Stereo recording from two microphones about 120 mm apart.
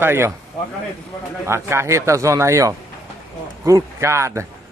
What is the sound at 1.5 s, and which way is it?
Speech, 20° right (ahead or behind).